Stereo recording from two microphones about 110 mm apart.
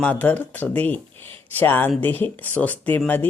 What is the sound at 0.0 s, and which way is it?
Speech, 15° left (ahead or behind).